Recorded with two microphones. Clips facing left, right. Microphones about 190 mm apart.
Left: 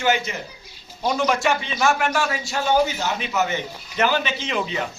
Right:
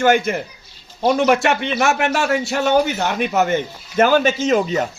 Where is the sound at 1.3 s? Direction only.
65° right (ahead or behind); by 4.9 s 40° right (ahead or behind).